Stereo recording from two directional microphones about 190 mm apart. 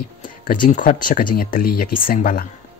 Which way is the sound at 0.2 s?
45° left (ahead or behind).